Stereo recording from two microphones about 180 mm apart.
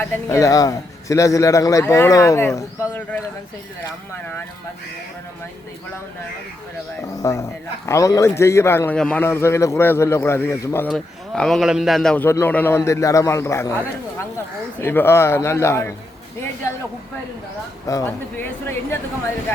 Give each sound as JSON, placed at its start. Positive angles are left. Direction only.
{"t": 0.0, "sound": "a man's voice", "side_deg": 15}
{"t": 7.2, "sound": "a man's voice", "side_deg": 15}
{"t": 10.8, "sound": "a man's voice", "side_deg": 5}
{"t": 17.8, "sound": "a man's voice", "side_deg": 15}